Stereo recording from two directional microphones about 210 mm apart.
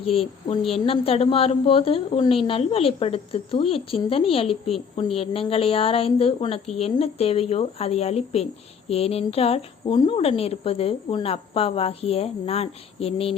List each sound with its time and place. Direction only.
0.0 s a woman's voice: 25° left (ahead or behind)